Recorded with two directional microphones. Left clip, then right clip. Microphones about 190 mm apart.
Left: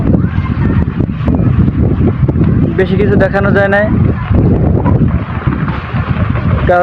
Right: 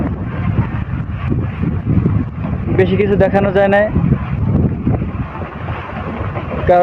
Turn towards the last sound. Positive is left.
turn(degrees=0)  # may be behind; listen again after turning